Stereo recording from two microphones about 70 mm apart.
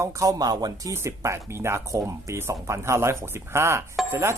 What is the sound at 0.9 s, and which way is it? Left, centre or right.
Speech, right.